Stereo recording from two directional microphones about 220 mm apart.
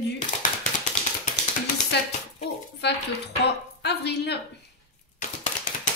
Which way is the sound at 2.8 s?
50° left (ahead or behind).